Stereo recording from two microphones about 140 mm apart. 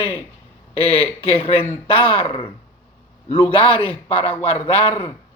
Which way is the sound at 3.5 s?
40° left (ahead or behind).